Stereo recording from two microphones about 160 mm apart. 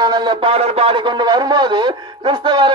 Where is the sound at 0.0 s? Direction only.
25° right (ahead or behind).